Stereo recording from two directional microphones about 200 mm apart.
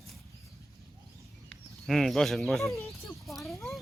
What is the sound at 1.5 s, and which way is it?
Speech, centre (ahead or behind).